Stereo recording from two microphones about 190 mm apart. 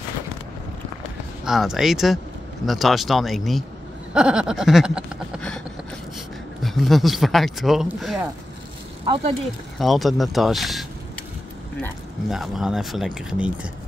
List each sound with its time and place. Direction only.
1.4 s speech: centre (ahead or behind)
6.6 s speech: centre (ahead or behind)
9.0 s speech: 25° right (ahead or behind)
9.8 s speech: centre (ahead or behind)
12.3 s speech: centre (ahead or behind)